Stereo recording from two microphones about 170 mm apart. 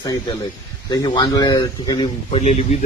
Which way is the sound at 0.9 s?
25° left (ahead or behind).